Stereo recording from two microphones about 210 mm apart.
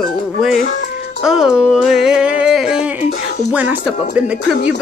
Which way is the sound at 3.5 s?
5° right (ahead or behind).